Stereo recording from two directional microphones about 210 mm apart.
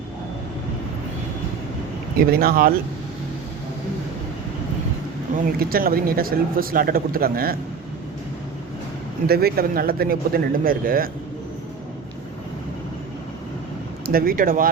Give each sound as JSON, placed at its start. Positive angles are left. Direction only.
{"t": 2.1, "sound": "speech", "side_deg": -45}
{"t": 5.5, "sound": "speech", "side_deg": -45}
{"t": 9.2, "sound": "speech", "side_deg": -45}
{"t": 14.1, "sound": "speech", "side_deg": -45}